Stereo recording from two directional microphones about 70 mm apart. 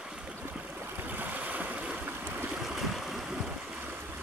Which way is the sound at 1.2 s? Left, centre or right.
Right.